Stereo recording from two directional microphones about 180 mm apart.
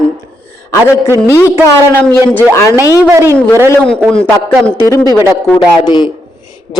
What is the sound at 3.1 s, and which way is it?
Speech, 15° right (ahead or behind).